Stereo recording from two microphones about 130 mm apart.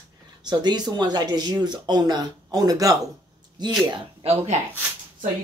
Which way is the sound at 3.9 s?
50° right (ahead or behind).